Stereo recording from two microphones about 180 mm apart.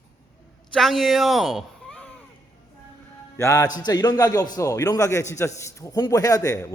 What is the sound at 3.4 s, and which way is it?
A man's voice, 15° left (ahead or behind).